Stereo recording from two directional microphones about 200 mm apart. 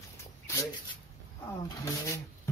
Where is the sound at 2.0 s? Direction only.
15° left (ahead or behind).